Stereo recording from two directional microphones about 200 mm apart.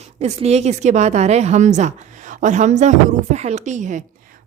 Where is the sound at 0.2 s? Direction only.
30° right (ahead or behind).